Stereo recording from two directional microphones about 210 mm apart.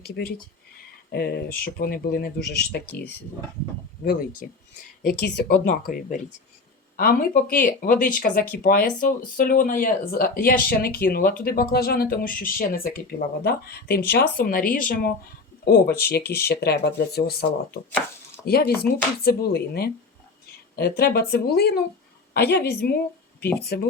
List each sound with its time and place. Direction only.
0.0 s speech: 50° left (ahead or behind)
4.0 s speech: 45° left (ahead or behind)